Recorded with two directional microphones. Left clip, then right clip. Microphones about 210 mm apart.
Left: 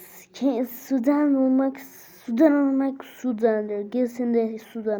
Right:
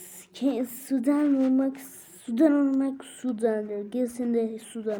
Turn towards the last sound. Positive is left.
turn(degrees=5)  # may be behind; listen again after turning